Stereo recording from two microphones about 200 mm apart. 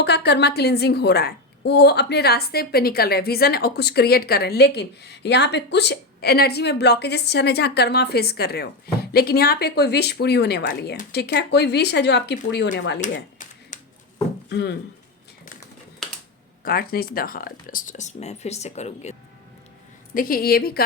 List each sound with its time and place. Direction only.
0.0 s a woman's voice: 55° left (ahead or behind)
13.0 s a sound: 40° left (ahead or behind)
14.5 s a woman's voice: 60° left (ahead or behind)
16.6 s speech: 50° left (ahead or behind)
20.1 s a woman's voice: 45° left (ahead or behind)